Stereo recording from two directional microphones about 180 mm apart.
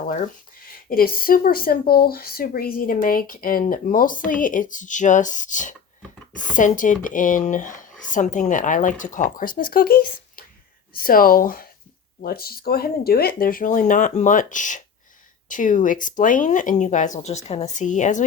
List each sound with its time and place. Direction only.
0.7 s speech: 55° left (ahead or behind)